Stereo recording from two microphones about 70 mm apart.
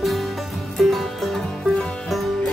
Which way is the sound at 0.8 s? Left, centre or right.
Centre.